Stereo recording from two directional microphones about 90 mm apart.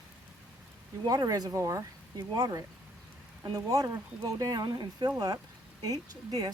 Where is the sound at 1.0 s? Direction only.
50° right (ahead or behind).